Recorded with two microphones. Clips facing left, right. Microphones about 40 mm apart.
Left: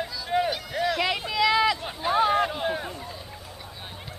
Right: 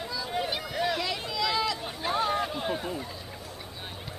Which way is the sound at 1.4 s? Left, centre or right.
Left.